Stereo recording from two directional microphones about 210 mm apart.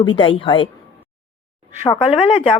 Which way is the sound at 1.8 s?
25° left (ahead or behind).